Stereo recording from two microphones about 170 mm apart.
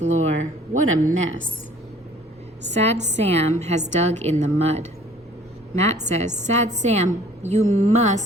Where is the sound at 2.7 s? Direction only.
40° right (ahead or behind).